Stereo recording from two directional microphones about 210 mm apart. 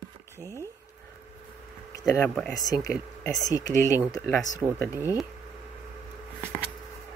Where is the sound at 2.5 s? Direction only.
15° left (ahead or behind).